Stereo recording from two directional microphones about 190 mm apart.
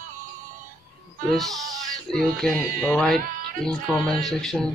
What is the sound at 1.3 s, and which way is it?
Speech, centre (ahead or behind).